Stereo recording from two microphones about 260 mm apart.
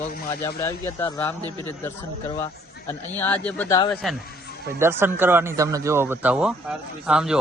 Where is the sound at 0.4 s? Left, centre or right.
Centre.